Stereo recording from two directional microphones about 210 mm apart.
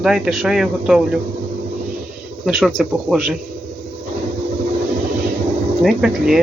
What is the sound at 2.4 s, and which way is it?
Speech, centre (ahead or behind).